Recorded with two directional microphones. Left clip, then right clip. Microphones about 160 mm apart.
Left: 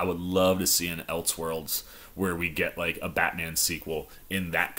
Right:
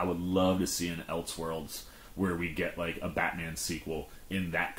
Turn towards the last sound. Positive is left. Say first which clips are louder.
# left 5 dB
turn(degrees=25)  # may be behind; listen again after turning